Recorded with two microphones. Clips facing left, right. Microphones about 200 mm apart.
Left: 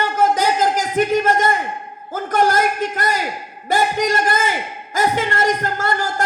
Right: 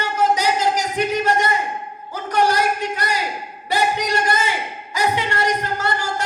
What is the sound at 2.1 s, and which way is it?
A man's voice, 45° left (ahead or behind).